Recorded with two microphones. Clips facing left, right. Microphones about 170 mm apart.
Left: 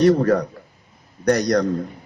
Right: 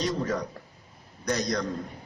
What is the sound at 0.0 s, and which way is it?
A man's voice, 65° left (ahead or behind).